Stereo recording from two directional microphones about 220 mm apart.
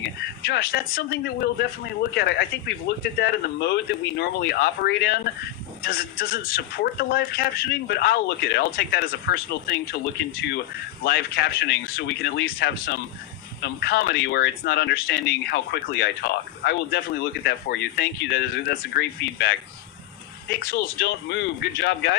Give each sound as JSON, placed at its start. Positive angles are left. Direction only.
{"t": 0.4, "sound": "speech", "side_deg": 45}
{"t": 11.0, "sound": "speech", "side_deg": 45}
{"t": 20.6, "sound": "speech", "side_deg": 45}